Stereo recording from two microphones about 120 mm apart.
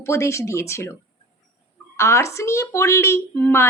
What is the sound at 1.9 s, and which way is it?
A woman's voice, 25° left (ahead or behind).